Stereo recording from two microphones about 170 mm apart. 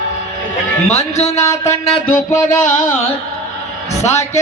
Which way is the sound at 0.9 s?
40° left (ahead or behind).